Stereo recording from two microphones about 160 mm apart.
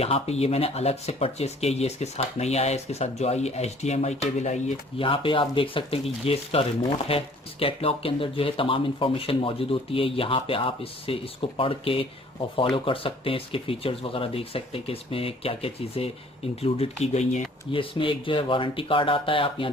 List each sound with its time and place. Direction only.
0.0 s speech: 40° left (ahead or behind)
5.0 s speech: 35° left (ahead or behind)
17.7 s speech: 35° left (ahead or behind)